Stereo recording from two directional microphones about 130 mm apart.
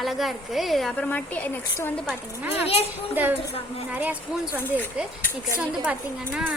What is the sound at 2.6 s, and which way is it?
Speech, 50° left (ahead or behind).